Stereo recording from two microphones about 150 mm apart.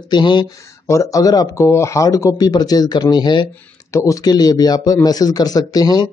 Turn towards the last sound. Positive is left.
turn(degrees=25)  # may be behind; listen again after turning